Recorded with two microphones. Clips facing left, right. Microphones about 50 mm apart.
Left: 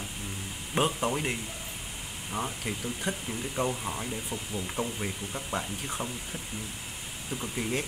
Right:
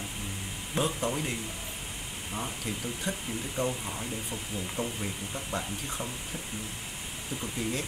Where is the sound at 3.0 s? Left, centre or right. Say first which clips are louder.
Left 1 dB; centre.